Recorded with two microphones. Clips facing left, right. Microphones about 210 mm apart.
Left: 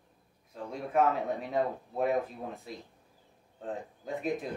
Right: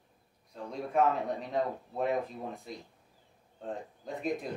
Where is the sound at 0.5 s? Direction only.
5° left (ahead or behind).